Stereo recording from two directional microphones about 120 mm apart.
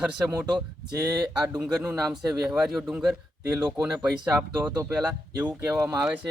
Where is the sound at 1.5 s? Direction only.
10° right (ahead or behind).